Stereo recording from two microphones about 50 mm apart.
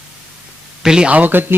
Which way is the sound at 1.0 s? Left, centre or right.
Right.